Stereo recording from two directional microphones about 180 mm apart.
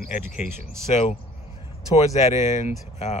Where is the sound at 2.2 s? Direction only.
35° left (ahead or behind).